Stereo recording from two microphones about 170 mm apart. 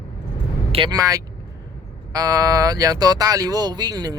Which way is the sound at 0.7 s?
25° right (ahead or behind).